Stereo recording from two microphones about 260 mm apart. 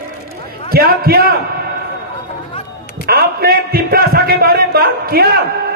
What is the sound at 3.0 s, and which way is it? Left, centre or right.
A man's voice, right.